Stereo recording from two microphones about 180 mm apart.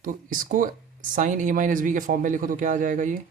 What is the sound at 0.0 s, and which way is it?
Speech, 50° right (ahead or behind).